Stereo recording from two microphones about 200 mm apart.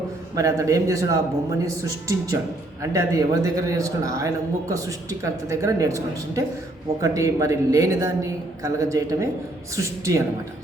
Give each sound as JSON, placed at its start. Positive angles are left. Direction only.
{"t": 0.3, "sound": "a man's voice", "side_deg": -15}